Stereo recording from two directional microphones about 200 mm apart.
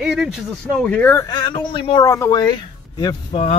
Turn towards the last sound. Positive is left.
turn(degrees=25)  # may be behind; listen again after turning